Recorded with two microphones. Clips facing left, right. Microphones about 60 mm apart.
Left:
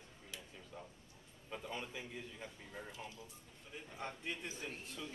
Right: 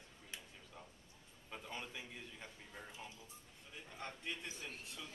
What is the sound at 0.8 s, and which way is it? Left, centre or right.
A man's voice, centre.